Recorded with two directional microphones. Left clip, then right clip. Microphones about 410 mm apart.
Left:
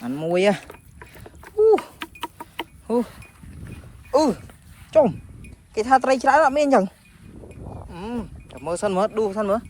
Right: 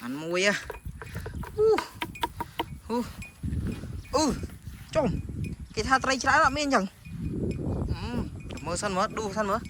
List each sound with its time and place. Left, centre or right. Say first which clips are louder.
0.0 s speech: left 7 dB; centre
0.9 s livestock: right 3 dB; centre
1.5 s a sound: left 7 dB; centre
2.8 s speech: left 10 dB; centre
4.1 s speech: left 7 dB; centre
7.4 s livestock: right 5 dB; right
7.9 s a sound: left 4 dB; centre